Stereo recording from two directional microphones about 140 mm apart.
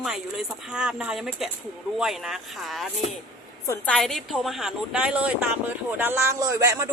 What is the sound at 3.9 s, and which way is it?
A man's voice, 5° left (ahead or behind).